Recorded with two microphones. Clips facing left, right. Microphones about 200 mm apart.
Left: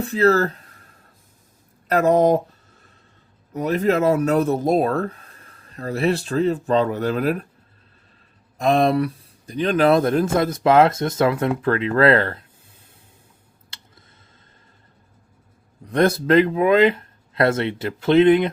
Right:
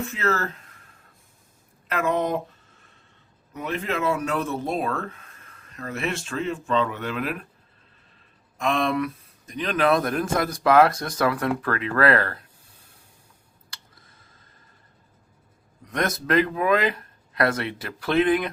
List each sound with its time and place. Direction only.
0.0 s speech: 35° left (ahead or behind)
1.9 s speech: 40° left (ahead or behind)
8.5 s speech: 35° left (ahead or behind)
13.7 s a sound: 25° left (ahead or behind)
15.8 s speech: 30° left (ahead or behind)